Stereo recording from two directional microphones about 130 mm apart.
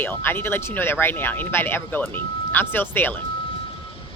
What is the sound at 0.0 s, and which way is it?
Speech, 15° left (ahead or behind).